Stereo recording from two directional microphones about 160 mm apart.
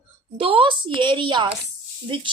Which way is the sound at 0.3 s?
35° right (ahead or behind).